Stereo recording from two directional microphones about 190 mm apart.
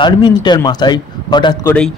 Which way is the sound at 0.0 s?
25° left (ahead or behind).